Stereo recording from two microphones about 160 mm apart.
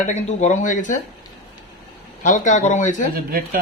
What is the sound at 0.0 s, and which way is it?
Speech, 50° left (ahead or behind).